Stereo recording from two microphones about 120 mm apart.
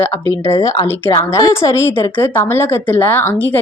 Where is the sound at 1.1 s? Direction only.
30° left (ahead or behind).